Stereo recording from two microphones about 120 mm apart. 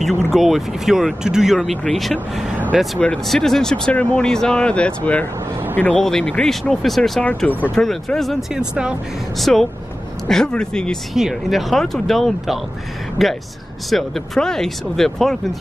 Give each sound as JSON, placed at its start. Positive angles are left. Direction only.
{"t": 0.3, "sound": "speech", "side_deg": 0}
{"t": 7.7, "sound": "speech", "side_deg": 5}